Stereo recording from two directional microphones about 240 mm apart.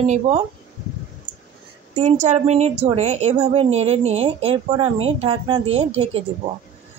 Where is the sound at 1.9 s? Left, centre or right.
Right.